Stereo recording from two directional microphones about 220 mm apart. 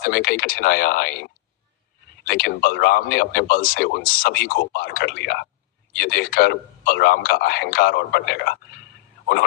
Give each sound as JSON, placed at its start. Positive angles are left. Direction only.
{"t": 0.0, "sound": "a man's voice", "side_deg": 40}
{"t": 2.2, "sound": "a man's voice", "side_deg": 45}